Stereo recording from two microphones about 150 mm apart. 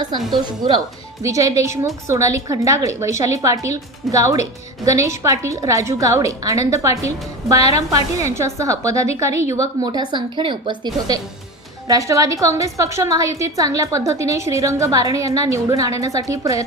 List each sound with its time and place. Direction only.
0.4 s a woman's voice: 30° right (ahead or behind)